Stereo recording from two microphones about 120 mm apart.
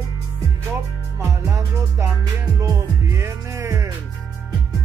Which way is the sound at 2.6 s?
25° right (ahead or behind).